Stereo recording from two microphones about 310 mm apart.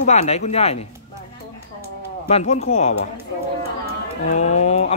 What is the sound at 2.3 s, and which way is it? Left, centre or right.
Speech, centre.